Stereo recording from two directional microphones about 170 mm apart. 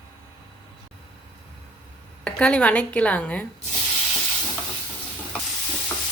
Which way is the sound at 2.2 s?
5° left (ahead or behind).